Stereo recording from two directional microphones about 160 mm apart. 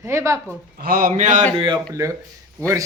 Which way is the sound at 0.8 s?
65° right (ahead or behind).